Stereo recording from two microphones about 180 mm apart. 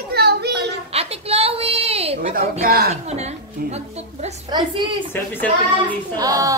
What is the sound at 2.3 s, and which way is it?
Speech, 55° right (ahead or behind).